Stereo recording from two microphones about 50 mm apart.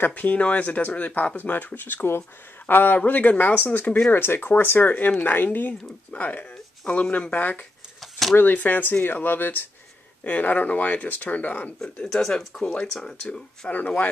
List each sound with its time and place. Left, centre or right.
0.0 s a man's voice: left
4.8 s speech: left
8.0 s a sound: centre
8.4 s speech: left
10.2 s speech: left
12.1 s speech: centre
13.7 s speech: left